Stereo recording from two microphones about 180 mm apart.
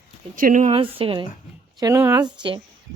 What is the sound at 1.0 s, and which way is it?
Speech, 30° right (ahead or behind).